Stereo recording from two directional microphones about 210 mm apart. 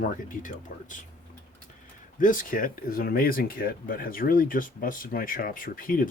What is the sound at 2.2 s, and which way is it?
Speech, 40° left (ahead or behind).